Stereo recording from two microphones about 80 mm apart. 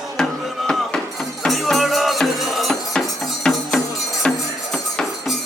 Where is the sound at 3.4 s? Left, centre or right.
Centre.